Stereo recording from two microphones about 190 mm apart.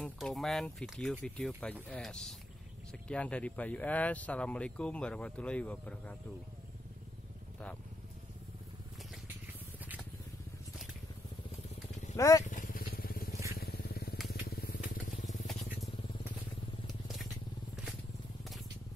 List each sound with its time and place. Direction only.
0.0 s speech: centre (ahead or behind)
12.2 s speech: 15° left (ahead or behind)
12.4 s motorcycle: 45° left (ahead or behind)
13.5 s vehicle: 55° left (ahead or behind)
14.1 s vehicle: centre (ahead or behind)
14.4 s vehicle: 55° left (ahead or behind)
16.8 s vehicle: centre (ahead or behind)